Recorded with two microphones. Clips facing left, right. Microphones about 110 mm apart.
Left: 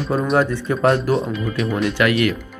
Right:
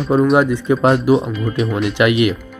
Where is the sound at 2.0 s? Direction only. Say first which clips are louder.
Right 4 dB; 15° right (ahead or behind).